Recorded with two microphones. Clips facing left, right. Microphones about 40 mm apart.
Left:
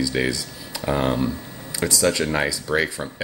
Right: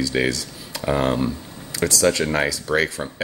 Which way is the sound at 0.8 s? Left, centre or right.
Centre.